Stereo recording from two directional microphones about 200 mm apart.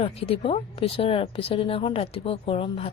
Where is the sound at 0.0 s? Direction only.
30° left (ahead or behind).